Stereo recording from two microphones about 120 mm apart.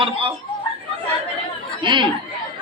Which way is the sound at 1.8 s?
40° right (ahead or behind).